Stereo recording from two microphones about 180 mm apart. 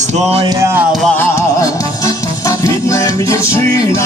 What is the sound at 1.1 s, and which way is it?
Music, 10° left (ahead or behind).